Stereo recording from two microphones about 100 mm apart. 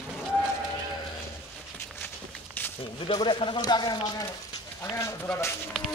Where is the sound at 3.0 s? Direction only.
55° left (ahead or behind).